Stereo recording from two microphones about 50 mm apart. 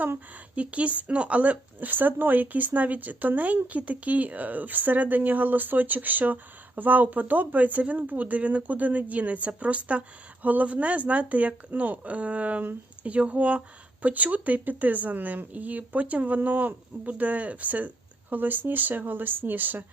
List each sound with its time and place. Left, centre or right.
0.5 s speech: right